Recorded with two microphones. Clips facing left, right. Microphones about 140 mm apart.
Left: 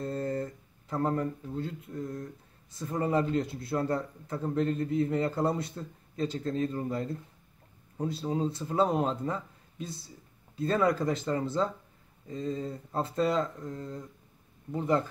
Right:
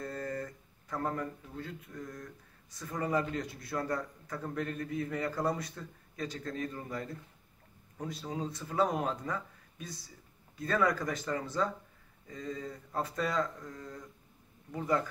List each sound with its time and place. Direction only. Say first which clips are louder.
0.0 s speech: left 6 dB; 30° left (ahead or behind)